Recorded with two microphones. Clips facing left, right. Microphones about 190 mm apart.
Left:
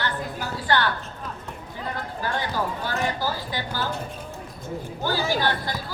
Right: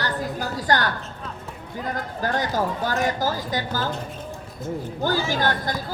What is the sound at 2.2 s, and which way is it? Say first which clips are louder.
Speech: right 4 dB; 45° right (ahead or behind).